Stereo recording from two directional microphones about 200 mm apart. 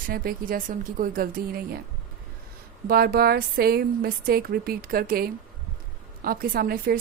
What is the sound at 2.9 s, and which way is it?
A woman's voice, 50° right (ahead or behind).